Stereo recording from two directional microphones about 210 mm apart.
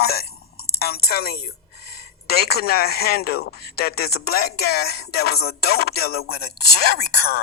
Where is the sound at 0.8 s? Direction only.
50° left (ahead or behind).